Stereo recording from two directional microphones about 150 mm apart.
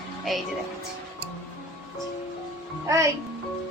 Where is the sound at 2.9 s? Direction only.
20° right (ahead or behind).